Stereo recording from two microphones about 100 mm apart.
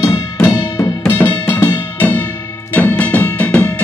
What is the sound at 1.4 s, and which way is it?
Music, 20° left (ahead or behind).